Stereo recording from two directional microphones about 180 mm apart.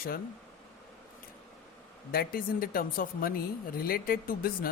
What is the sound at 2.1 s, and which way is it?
Speech, 55° left (ahead or behind).